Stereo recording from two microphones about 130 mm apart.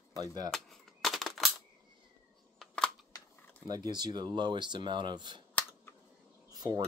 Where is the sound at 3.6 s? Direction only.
30° right (ahead or behind).